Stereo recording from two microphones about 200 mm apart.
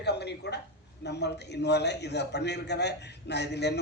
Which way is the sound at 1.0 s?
55° left (ahead or behind).